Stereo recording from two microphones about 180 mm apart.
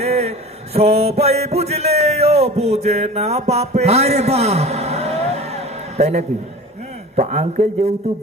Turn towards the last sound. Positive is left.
turn(degrees=-40)  # may be behind; listen again after turning